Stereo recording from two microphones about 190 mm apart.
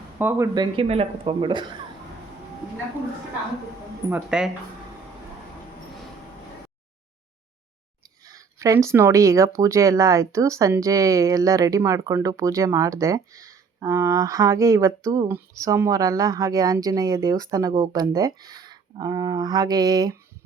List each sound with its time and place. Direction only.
0.2 s speech: 10° right (ahead or behind)
4.1 s speech: 5° right (ahead or behind)
8.3 s speech: 15° right (ahead or behind)